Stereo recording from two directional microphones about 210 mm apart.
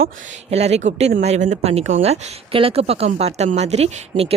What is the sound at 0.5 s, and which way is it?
Speech, 30° right (ahead or behind).